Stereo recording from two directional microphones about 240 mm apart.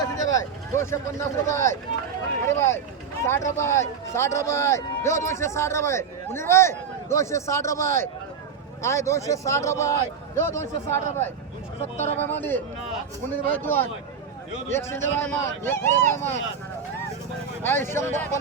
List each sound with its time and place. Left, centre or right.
0.0 s vehicle: centre
2.5 s speech: centre
11.9 s speech: left
12.2 s speech: centre
17.6 s speech: centre